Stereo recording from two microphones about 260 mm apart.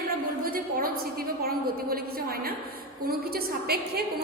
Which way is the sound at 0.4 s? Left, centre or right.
Right.